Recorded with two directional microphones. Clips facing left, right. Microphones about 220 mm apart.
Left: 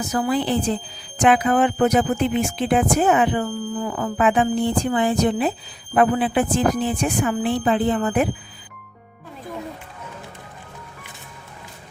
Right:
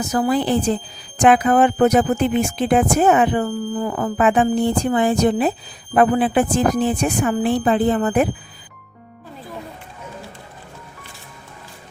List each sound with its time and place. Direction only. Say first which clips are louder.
0.1 s speech: right 3 dB; 40° right (ahead or behind)